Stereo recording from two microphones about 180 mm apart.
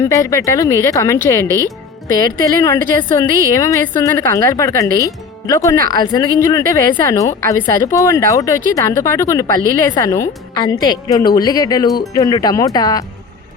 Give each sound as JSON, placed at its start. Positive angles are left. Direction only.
{"t": 0.0, "sound": "speech", "side_deg": 15}
{"t": 2.0, "sound": "a woman's voice", "side_deg": -55}
{"t": 2.4, "sound": "speech", "side_deg": 20}
{"t": 2.7, "sound": "a woman's voice", "side_deg": -50}
{"t": 3.5, "sound": "speech", "side_deg": 20}
{"t": 5.7, "sound": "a woman's voice", "side_deg": -55}
{"t": 6.1, "sound": "a woman's voice", "side_deg": 20}